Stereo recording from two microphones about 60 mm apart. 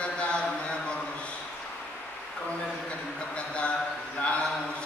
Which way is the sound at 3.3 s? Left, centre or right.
Left.